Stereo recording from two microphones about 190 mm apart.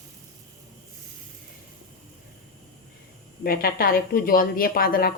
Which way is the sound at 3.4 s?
50° left (ahead or behind).